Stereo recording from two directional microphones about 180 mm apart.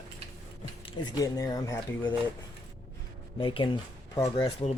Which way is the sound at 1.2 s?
20° left (ahead or behind).